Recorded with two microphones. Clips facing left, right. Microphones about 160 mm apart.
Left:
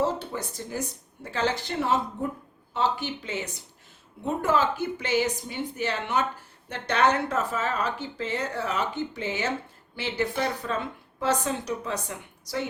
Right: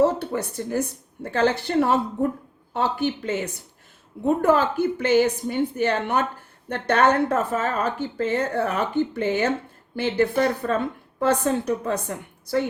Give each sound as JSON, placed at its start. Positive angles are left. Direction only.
{"t": 0.0, "sound": "speech", "side_deg": -65}